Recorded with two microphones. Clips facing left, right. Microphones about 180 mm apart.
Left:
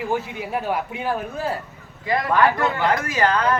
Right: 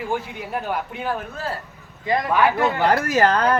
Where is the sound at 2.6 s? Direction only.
35° right (ahead or behind).